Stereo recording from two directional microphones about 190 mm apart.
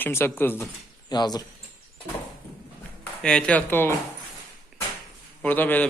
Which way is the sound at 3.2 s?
5° left (ahead or behind).